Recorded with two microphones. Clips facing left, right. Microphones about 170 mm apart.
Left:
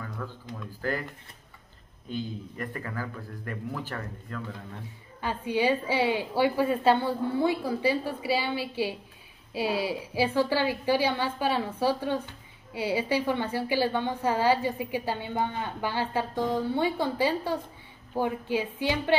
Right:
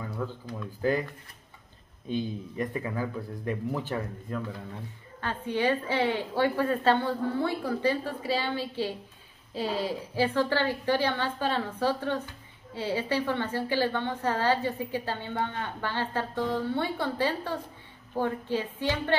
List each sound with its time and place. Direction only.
0.2 s speech: 15° right (ahead or behind)
2.0 s speech: 20° right (ahead or behind)
5.2 s a woman's voice: 10° left (ahead or behind)